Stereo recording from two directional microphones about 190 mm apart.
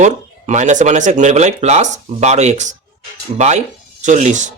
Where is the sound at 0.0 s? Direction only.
40° right (ahead or behind).